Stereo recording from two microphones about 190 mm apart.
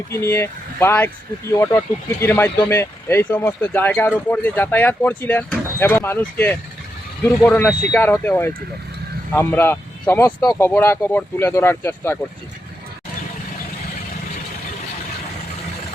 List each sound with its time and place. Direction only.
0.1 s speech: 15° left (ahead or behind)